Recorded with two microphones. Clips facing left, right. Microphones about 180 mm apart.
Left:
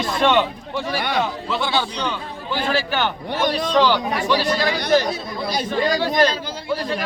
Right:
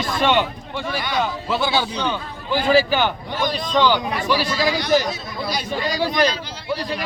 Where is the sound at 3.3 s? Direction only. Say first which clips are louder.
Left 3 dB; 65° left (ahead or behind).